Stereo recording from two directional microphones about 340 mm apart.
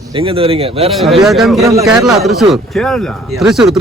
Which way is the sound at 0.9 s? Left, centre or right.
Centre.